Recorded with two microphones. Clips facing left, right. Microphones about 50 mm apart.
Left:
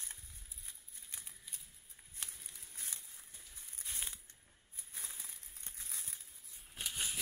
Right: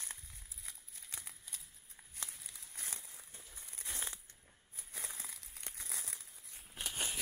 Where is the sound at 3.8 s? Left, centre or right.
Right.